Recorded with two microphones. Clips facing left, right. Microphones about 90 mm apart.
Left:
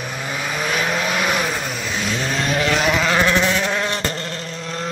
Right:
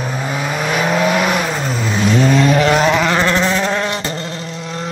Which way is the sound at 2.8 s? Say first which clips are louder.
Right 4 dB; 20° right (ahead or behind).